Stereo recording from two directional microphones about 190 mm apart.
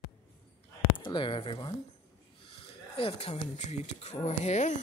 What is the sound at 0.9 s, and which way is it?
Speech, 25° left (ahead or behind).